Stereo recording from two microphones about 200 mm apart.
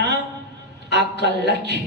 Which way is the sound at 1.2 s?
55° right (ahead or behind).